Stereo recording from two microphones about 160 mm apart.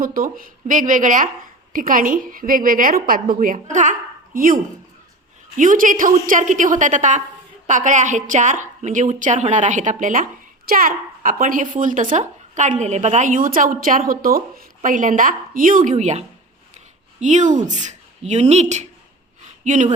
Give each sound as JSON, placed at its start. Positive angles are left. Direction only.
{"t": 0.0, "sound": "a woman's voice", "side_deg": -65}